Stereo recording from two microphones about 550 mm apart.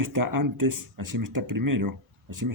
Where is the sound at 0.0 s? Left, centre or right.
Right.